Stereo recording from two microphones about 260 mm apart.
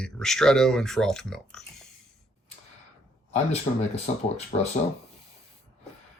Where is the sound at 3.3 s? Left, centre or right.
Left.